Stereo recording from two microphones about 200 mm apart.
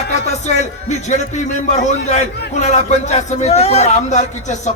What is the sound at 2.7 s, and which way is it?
A man's voice, 35° left (ahead or behind).